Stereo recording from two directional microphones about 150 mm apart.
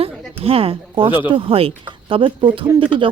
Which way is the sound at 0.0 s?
40° right (ahead or behind).